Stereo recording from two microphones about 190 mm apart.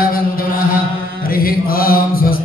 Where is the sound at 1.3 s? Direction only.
50° left (ahead or behind).